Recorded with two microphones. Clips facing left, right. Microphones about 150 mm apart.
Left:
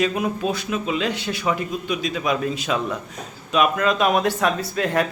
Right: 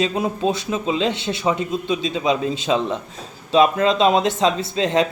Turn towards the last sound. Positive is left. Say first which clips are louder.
# right 3 dB
turn(degrees=-20)  # may be behind; listen again after turning